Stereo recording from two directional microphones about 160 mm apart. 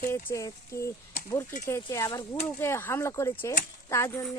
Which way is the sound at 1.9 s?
20° left (ahead or behind).